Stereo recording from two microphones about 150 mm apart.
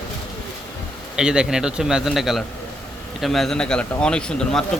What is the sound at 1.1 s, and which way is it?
Speech, 5° right (ahead or behind).